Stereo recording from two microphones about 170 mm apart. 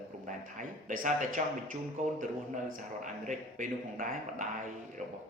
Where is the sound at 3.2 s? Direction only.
50° right (ahead or behind).